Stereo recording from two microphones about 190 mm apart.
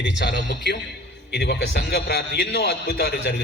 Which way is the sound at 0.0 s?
70° left (ahead or behind).